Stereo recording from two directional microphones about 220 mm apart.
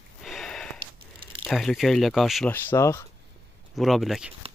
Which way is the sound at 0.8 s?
25° right (ahead or behind).